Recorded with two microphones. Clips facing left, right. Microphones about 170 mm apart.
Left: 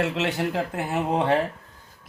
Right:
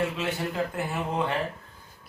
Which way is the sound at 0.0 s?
80° left.